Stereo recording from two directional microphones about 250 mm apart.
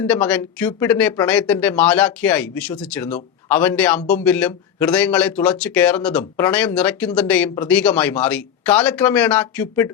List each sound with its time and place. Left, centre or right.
0.1 s speech: centre